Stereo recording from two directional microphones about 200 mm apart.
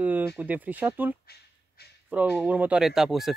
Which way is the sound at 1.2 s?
55° left (ahead or behind).